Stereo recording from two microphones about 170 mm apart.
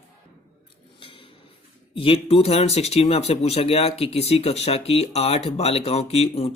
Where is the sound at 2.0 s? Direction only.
35° left (ahead or behind).